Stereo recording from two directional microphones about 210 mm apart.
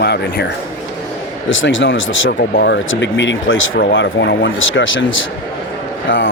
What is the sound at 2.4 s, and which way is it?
Speech, 45° left (ahead or behind).